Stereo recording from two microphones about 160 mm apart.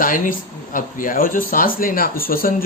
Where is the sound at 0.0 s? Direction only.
55° left (ahead or behind).